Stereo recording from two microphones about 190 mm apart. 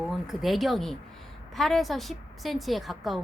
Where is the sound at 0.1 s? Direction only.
Centre (ahead or behind).